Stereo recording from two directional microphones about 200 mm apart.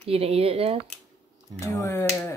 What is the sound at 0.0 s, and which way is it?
Speech, 30° right (ahead or behind).